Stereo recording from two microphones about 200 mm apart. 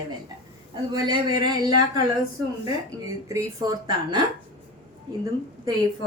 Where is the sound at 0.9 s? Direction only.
20° right (ahead or behind).